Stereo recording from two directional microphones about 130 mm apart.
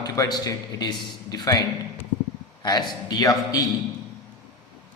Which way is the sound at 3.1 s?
30° left (ahead or behind).